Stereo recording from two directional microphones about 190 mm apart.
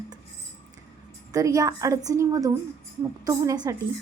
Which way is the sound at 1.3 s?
15° right (ahead or behind).